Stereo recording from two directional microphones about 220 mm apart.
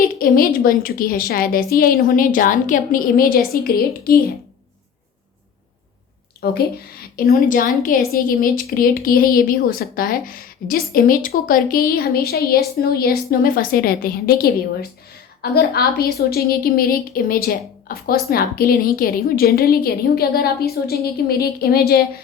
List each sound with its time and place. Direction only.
0.0 s a woman's voice: 40° left (ahead or behind)
6.4 s a woman's voice: 45° left (ahead or behind)